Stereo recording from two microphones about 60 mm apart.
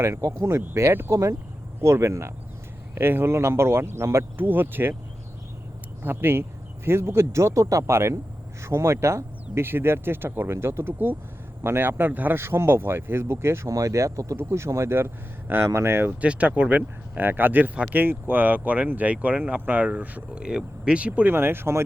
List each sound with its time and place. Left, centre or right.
0.0 s speech: right
2.9 s speech: right
4.4 s speech: right
6.0 s speech: right
10.9 s speech: right
12.4 s speech: right
13.7 s speech: right
16.2 s speech: right
20.4 s speech: centre
21.2 s speech: right